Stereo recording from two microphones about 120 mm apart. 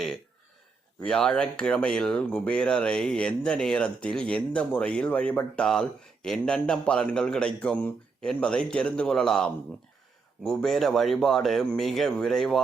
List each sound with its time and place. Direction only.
1.0 s speech: 5° left (ahead or behind)